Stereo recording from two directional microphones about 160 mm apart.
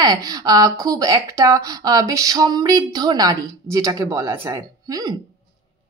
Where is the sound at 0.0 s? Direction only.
25° right (ahead or behind).